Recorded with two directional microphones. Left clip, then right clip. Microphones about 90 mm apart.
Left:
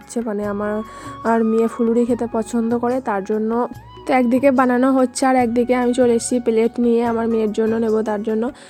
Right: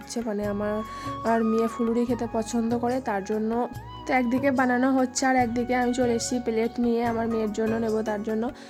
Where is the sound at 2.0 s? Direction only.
40° left (ahead or behind).